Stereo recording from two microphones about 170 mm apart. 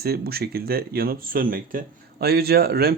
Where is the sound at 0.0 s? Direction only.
65° right (ahead or behind).